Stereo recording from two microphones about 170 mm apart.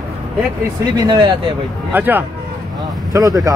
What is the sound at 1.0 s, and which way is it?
Speech, 25° right (ahead or behind).